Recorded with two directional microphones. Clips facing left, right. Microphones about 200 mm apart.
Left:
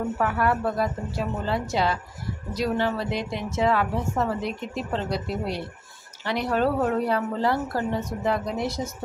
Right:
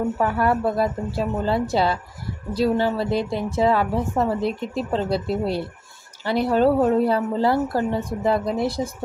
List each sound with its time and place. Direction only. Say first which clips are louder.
0.2 s a woman's voice: right 2 dB; 30° right (ahead or behind)